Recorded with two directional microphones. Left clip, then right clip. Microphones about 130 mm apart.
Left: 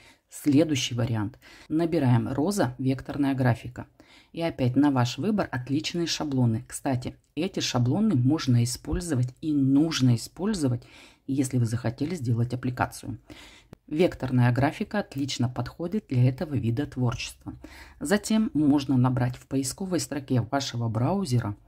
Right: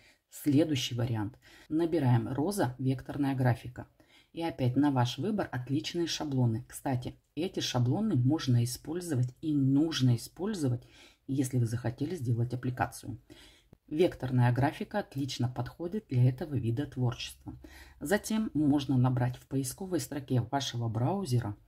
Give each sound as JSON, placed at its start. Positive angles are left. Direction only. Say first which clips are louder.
{"t": 0.4, "sound": "speech", "louder": "left 5 dB", "side_deg": 40}